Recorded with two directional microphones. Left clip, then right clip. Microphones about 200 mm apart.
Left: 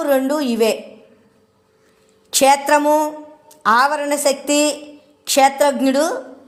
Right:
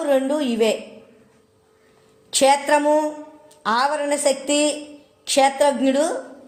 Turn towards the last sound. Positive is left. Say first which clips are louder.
# left 2 dB
turn(degrees=30)  # may be behind; listen again after turning